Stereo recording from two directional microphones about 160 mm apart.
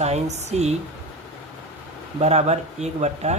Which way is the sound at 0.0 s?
45° right (ahead or behind).